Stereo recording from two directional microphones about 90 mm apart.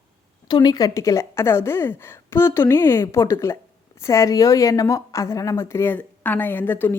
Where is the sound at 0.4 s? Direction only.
50° left (ahead or behind).